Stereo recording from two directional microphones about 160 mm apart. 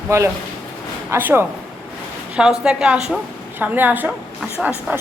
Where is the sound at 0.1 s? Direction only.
20° right (ahead or behind).